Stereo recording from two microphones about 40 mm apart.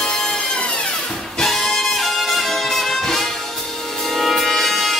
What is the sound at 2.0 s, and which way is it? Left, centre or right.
Music, centre.